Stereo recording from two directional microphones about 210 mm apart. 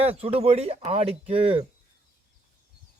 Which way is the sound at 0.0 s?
30° right (ahead or behind).